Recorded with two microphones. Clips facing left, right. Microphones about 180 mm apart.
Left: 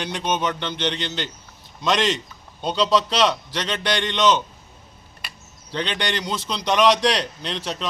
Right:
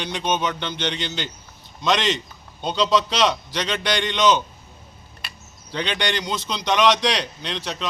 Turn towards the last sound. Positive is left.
turn(degrees=0)  # may be behind; listen again after turning